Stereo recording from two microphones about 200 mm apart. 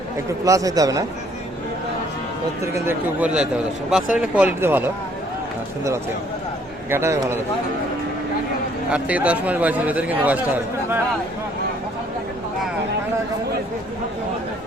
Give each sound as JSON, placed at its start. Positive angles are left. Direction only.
{"t": 0.4, "sound": "a man's voice", "side_deg": -15}
{"t": 2.7, "sound": "a man's voice", "side_deg": -10}
{"t": 6.9, "sound": "a man's voice", "side_deg": -15}
{"t": 8.9, "sound": "a man's voice", "side_deg": -5}